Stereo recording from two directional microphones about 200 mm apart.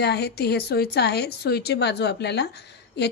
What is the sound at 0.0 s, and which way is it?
A woman's voice, 55° left (ahead or behind).